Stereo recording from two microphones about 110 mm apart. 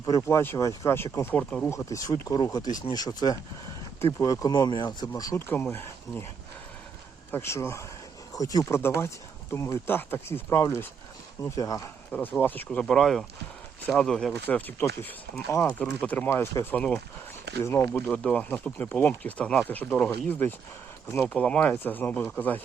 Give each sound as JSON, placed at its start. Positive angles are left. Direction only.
{"t": 0.0, "sound": "speech", "side_deg": 25}
{"t": 1.7, "sound": "speech", "side_deg": 30}
{"t": 7.3, "sound": "speech", "side_deg": 20}
{"t": 12.4, "sound": "speech", "side_deg": 15}
{"t": 12.8, "sound": "speech", "side_deg": 5}
{"t": 14.4, "sound": "speech", "side_deg": 15}
{"t": 16.7, "sound": "speech", "side_deg": 10}
{"t": 17.6, "sound": "speech", "side_deg": 25}
{"t": 21.2, "sound": "speech", "side_deg": 10}